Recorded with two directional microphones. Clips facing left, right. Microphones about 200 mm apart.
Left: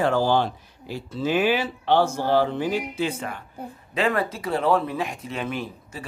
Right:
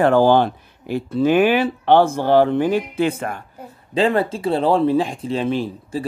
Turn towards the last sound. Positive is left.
turn(degrees=-30)  # may be behind; listen again after turning